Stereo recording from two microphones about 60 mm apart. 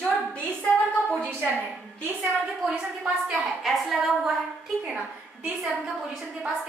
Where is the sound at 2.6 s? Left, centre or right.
Centre.